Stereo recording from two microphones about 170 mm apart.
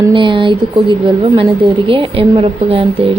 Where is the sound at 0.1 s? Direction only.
30° right (ahead or behind).